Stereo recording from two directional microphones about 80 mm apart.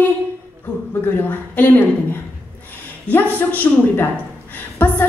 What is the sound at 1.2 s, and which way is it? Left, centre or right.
Speech, left.